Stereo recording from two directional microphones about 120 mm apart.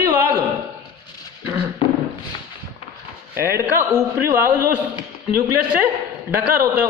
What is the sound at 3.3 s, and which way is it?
A man's voice, 20° right (ahead or behind).